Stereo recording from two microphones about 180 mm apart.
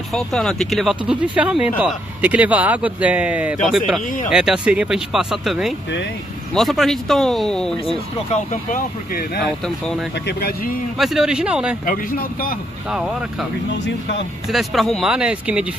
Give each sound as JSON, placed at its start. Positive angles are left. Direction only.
{"t": 0.1, "sound": "speech", "side_deg": 5}
{"t": 8.3, "sound": "a man's voice", "side_deg": 45}
{"t": 11.0, "sound": "speech", "side_deg": 0}
{"t": 11.8, "sound": "speech", "side_deg": 50}
{"t": 12.9, "sound": "speech", "side_deg": -5}
{"t": 14.5, "sound": "speech", "side_deg": 0}